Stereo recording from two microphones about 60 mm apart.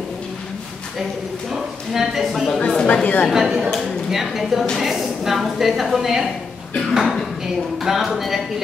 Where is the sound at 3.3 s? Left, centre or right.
Centre.